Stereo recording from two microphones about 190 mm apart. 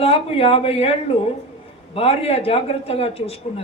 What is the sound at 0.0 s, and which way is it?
Speech, 30° left (ahead or behind).